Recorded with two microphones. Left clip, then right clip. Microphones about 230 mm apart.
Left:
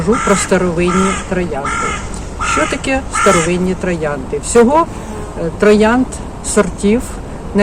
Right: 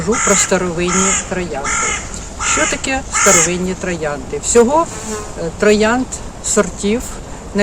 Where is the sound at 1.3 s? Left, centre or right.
Centre.